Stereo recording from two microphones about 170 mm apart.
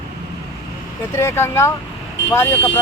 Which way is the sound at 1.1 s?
15° left (ahead or behind).